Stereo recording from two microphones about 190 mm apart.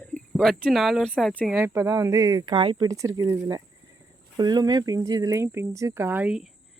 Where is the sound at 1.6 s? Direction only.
15° right (ahead or behind).